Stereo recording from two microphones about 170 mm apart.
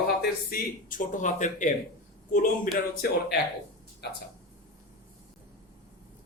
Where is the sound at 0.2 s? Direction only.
55° left (ahead or behind).